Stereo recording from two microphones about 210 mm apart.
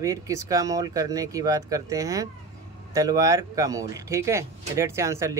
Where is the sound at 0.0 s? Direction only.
15° right (ahead or behind).